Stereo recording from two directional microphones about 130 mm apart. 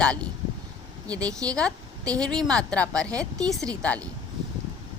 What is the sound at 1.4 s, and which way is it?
Speech, 30° right (ahead or behind).